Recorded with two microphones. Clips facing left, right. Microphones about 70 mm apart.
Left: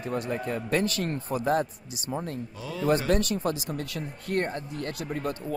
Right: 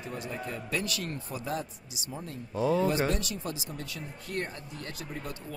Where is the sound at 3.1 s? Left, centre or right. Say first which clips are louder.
Left 8 dB; left.